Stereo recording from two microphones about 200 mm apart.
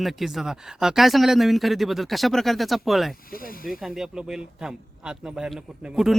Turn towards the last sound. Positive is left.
turn(degrees=-5)  # may be behind; listen again after turning